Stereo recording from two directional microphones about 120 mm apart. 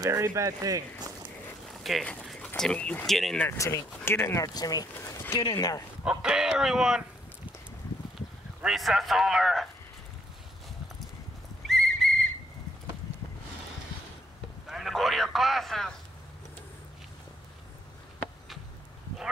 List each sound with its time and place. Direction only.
0.0 s speech: 25° right (ahead or behind)
1.7 s a sound: centre (ahead or behind)
2.2 s speech: 5° left (ahead or behind)
3.3 s speech: 20° left (ahead or behind)
4.6 s speech: 30° left (ahead or behind)
5.4 s speech: 35° left (ahead or behind)
6.0 s a man's voice: 5° right (ahead or behind)
8.6 s a man's voice: centre (ahead or behind)
11.6 s whistle: 5° left (ahead or behind)
14.7 s speech: centre (ahead or behind)